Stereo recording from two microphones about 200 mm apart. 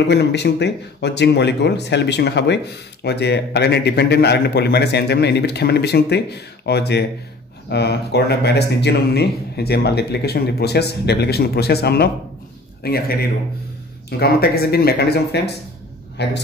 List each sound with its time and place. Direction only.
0.1 s speech: 55° left (ahead or behind)
14.2 s speech: 50° left (ahead or behind)